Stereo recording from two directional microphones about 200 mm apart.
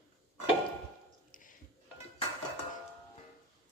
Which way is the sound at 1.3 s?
40° left (ahead or behind).